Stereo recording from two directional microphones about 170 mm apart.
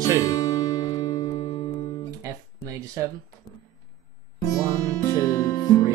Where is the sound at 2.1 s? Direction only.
20° right (ahead or behind).